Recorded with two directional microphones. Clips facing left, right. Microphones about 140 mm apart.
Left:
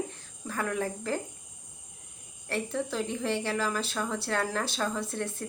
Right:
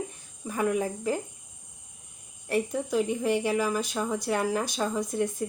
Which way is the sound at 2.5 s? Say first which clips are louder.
Right 4 dB; 15° right (ahead or behind).